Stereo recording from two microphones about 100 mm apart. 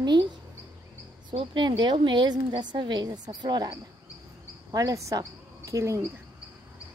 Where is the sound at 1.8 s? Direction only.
50° right (ahead or behind); by 6.0 s 30° right (ahead or behind).